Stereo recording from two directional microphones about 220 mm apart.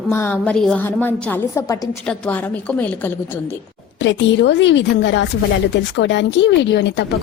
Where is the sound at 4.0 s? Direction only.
55° left (ahead or behind).